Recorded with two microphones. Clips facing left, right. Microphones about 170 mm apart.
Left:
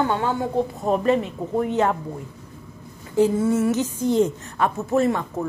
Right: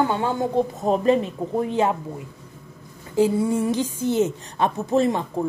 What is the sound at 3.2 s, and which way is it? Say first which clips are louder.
A woman's voice: left 1 dB; 10° right (ahead or behind).